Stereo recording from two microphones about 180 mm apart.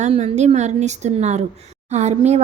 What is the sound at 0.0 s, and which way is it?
Speech, 40° right (ahead or behind).